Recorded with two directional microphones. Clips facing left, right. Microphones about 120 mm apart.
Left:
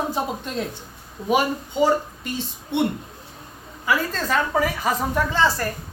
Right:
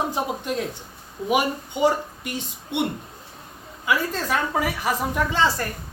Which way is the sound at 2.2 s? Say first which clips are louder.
Left 2 dB; 15° right (ahead or behind).